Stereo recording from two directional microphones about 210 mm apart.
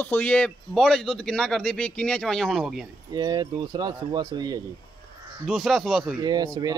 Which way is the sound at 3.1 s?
20° right (ahead or behind).